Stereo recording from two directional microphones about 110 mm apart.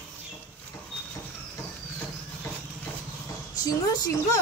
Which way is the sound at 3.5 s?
35° left (ahead or behind).